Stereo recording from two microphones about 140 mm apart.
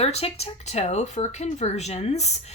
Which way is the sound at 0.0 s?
50° left (ahead or behind).